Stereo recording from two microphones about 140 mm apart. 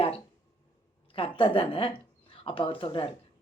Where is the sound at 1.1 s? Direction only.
40° left (ahead or behind).